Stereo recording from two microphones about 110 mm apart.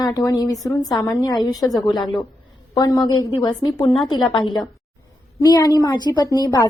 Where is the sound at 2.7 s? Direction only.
35° left (ahead or behind).